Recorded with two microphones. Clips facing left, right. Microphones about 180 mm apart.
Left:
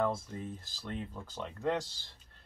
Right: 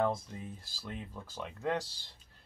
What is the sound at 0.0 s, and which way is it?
Speech, 15° right (ahead or behind).